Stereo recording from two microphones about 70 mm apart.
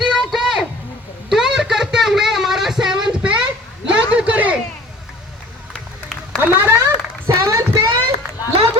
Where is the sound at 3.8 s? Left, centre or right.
Centre.